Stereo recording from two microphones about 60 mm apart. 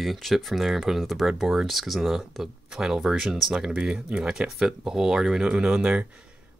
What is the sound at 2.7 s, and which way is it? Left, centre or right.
Speech, centre.